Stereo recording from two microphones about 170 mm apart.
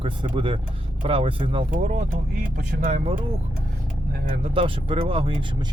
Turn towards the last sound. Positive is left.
turn(degrees=-30)  # may be behind; listen again after turning